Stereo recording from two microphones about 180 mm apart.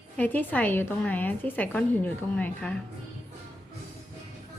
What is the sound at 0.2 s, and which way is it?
A woman's voice, 10° left (ahead or behind).